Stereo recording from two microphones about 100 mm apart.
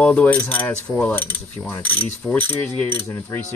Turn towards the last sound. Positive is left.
turn(degrees=25)  # may be behind; listen again after turning